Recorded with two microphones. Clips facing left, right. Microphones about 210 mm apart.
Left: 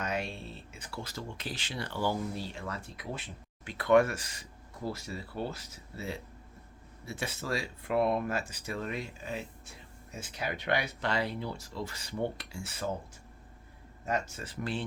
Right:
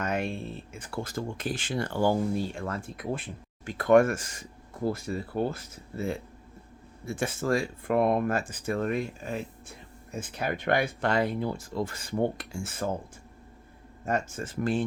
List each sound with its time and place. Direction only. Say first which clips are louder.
0.0 s a sound: right 4 dB; 50° right (ahead or behind)
0.7 s speech: right 7 dB; 50° right (ahead or behind)
14.0 s speech: right 4 dB; 50° right (ahead or behind)